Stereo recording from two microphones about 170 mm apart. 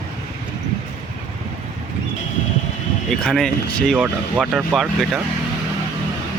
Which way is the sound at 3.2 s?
Centre (ahead or behind).